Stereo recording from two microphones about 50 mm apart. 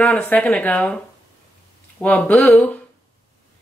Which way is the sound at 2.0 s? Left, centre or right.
Left.